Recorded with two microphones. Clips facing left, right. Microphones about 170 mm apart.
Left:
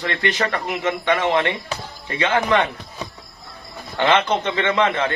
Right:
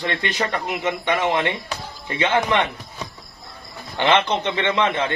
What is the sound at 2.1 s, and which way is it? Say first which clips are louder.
Speech: left 1 dB; 25° right (ahead or behind).